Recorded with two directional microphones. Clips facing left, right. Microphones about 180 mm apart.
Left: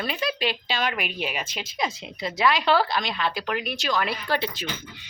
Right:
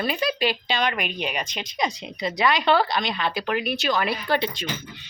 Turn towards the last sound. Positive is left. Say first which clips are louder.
# right 3 dB
turn(degrees=0)  # may be behind; listen again after turning